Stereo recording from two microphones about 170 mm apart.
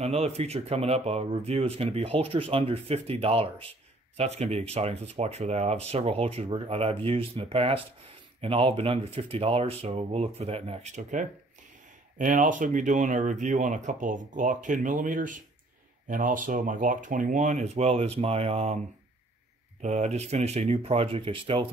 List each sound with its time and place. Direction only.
0.0 s speech: 40° right (ahead or behind)
19.8 s speech: 45° right (ahead or behind)